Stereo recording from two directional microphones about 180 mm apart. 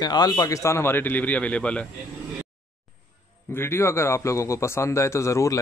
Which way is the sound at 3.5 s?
15° left (ahead or behind).